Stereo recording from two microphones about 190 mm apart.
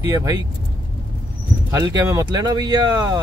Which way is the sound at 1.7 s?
20° right (ahead or behind).